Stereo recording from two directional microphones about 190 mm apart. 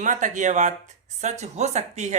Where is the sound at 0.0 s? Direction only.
40° right (ahead or behind).